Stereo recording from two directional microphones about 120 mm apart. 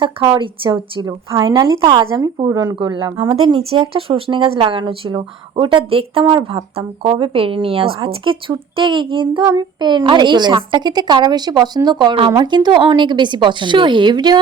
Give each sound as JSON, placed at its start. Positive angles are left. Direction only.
{"t": 0.0, "sound": "a woman's voice", "side_deg": -40}
{"t": 6.7, "sound": "a woman's voice", "side_deg": -55}